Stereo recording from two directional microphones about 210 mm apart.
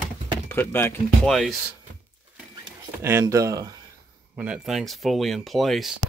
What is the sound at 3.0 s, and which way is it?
Speech, 15° right (ahead or behind).